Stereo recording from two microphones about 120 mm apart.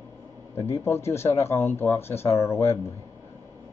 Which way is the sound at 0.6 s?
20° left (ahead or behind).